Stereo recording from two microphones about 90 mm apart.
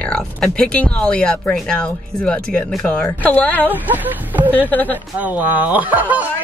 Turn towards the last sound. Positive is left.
turn(degrees=-20)  # may be behind; listen again after turning